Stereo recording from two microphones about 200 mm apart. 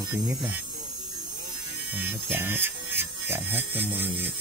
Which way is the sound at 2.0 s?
10° right (ahead or behind).